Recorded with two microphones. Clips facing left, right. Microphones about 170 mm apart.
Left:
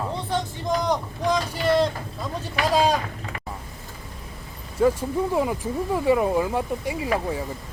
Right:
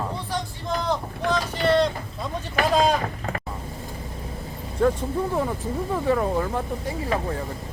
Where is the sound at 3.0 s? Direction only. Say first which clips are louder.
Right 5 dB; 45° right (ahead or behind).